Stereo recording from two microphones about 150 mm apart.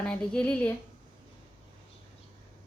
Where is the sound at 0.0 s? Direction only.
5° left (ahead or behind).